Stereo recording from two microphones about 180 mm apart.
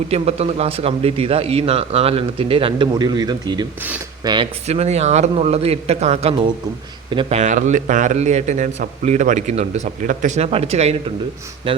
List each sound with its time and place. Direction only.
0.1 s a man's voice: 35° right (ahead or behind)
4.6 s a man's voice: 35° right (ahead or behind)